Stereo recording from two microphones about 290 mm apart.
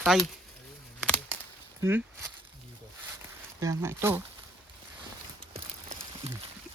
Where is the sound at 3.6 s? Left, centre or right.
Centre.